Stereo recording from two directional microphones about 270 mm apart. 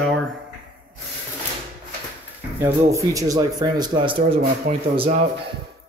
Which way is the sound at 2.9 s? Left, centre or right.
Centre.